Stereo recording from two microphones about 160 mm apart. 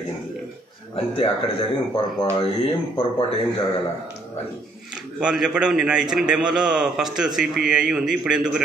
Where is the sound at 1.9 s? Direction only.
30° left (ahead or behind).